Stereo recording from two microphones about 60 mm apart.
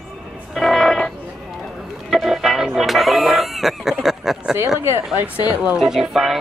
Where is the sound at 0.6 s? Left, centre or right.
Centre.